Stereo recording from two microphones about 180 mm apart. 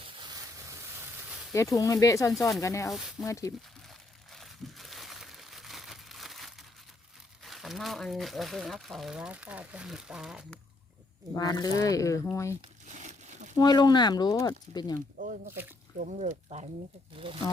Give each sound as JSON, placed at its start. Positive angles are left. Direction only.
{"t": 0.0, "sound": "a sound", "side_deg": -25}
{"t": 1.7, "sound": "speech", "side_deg": 20}
{"t": 2.9, "sound": "speech", "side_deg": 0}
{"t": 3.2, "sound": "speech", "side_deg": 15}
{"t": 4.4, "sound": "crumpling", "side_deg": 0}
{"t": 7.4, "sound": "speech", "side_deg": 0}
{"t": 11.3, "sound": "speech", "side_deg": 20}
{"t": 12.9, "sound": "a sound", "side_deg": -40}
{"t": 13.6, "sound": "speech", "side_deg": 25}
{"t": 15.2, "sound": "speech", "side_deg": -45}
{"t": 17.2, "sound": "speech", "side_deg": -30}